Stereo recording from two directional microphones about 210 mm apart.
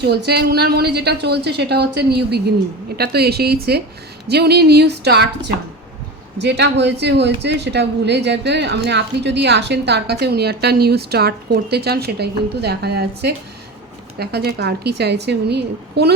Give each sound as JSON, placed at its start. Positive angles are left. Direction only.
{"t": 0.0, "sound": "speech", "side_deg": -50}
{"t": 6.4, "sound": "speech", "side_deg": -55}